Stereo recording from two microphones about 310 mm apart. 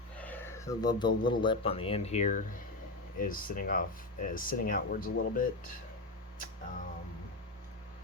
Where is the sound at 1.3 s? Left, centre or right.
Centre.